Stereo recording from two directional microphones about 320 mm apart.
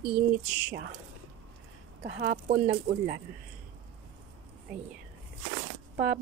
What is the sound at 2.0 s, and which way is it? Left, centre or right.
Speech, right.